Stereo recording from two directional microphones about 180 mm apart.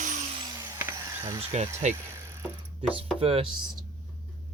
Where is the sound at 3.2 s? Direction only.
30° right (ahead or behind).